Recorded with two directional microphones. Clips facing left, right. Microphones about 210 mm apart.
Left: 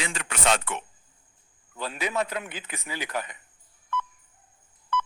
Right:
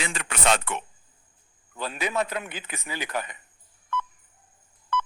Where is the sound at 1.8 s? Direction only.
55° right (ahead or behind).